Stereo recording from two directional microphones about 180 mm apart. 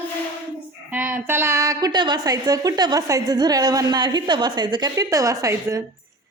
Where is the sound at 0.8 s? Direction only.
10° right (ahead or behind).